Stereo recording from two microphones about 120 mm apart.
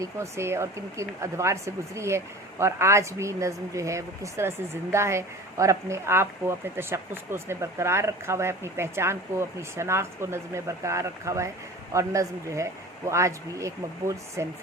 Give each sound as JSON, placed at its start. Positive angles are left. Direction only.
{"t": 0.0, "sound": "speech", "side_deg": -25}